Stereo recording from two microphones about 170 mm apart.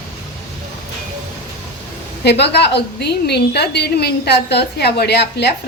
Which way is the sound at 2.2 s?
80° left.